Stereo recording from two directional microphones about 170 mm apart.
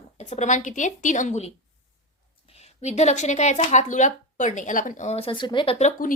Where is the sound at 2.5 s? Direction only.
40° left (ahead or behind).